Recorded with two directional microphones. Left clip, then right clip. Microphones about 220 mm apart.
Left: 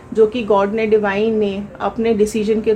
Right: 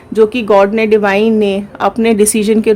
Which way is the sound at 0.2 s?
45° right (ahead or behind).